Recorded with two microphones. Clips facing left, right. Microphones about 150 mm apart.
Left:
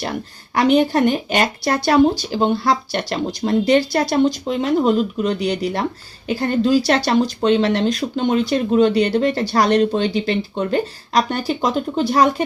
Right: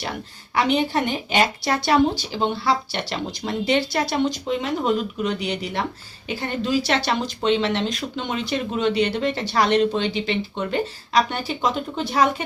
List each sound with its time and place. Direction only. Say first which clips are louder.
0.5 s speech: left 6 dB; 45° left (ahead or behind)